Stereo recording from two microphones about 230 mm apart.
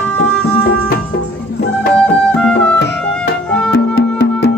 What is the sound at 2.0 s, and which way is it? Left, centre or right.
Music, centre.